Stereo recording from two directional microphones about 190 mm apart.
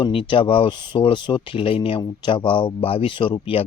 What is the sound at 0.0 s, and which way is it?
Speech, 25° left (ahead or behind).